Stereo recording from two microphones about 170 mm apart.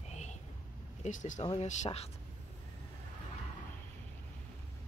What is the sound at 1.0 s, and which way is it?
Speech, 45° left (ahead or behind).